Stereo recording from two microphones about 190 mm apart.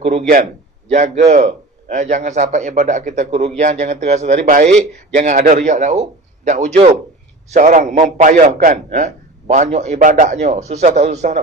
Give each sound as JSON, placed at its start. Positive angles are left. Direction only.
{"t": 0.0, "sound": "a man's voice", "side_deg": -35}